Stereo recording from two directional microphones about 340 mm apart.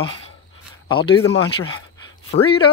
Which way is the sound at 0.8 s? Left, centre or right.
Centre.